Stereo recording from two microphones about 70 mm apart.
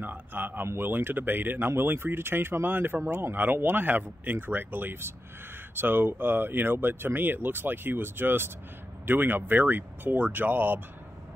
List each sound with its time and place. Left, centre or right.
0.0 s speech: right